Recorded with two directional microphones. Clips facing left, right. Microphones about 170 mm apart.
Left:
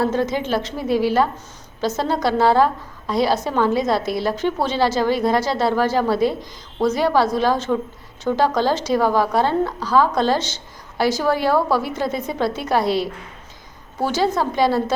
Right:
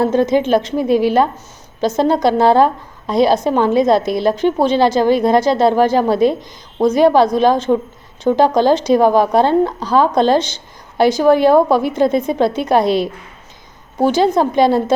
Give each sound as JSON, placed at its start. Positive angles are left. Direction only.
{"t": 0.0, "sound": "a woman's voice", "side_deg": -20}